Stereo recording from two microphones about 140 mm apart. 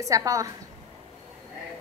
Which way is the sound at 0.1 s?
25° right (ahead or behind).